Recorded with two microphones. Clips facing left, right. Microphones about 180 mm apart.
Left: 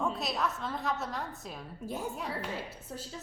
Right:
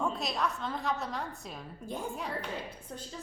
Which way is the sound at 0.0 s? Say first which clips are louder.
Even; centre (ahead or behind).